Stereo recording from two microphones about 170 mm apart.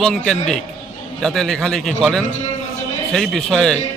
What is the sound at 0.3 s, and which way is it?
A man's voice, 5° left (ahead or behind).